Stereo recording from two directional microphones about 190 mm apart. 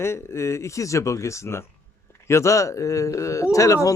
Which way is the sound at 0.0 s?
15° left (ahead or behind).